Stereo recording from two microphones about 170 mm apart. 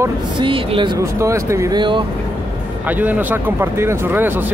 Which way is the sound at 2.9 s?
10° right (ahead or behind).